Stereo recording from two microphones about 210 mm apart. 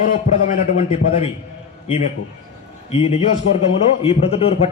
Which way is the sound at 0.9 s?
25° left (ahead or behind).